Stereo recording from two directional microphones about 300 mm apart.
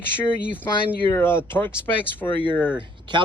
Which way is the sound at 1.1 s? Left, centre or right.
Centre.